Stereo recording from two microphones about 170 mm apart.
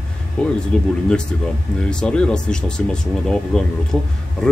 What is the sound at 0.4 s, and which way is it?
Speech, 5° left (ahead or behind).